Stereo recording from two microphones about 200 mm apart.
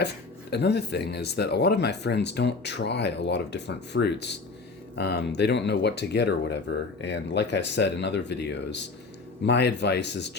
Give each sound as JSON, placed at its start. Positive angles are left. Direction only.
{"t": 0.5, "sound": "speech", "side_deg": 55}